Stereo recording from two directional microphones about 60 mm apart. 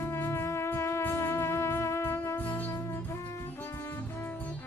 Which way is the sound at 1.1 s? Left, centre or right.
Left.